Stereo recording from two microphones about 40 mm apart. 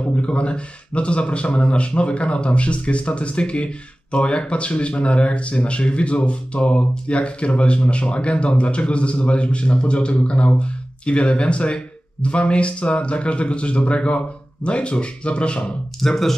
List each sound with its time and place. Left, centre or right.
0.0 s a man's voice: left
16.0 s speech: centre